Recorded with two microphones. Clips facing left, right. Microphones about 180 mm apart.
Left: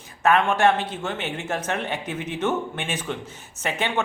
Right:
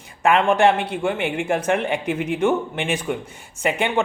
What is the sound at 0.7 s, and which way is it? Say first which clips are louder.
Speech: right 3 dB; 60° right (ahead or behind).